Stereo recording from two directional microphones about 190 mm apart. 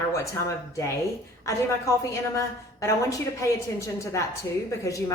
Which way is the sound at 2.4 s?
15° left (ahead or behind).